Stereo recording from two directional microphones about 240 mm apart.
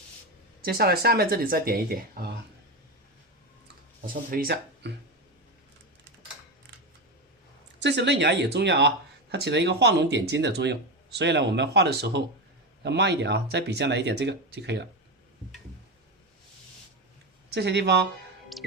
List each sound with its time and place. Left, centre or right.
0.6 s speech: right
4.0 s speech: right
7.8 s speech: right
17.5 s speech: right
18.5 s music: centre